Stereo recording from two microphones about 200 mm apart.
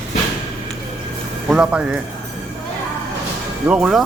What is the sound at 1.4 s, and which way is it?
Speech, 5° right (ahead or behind).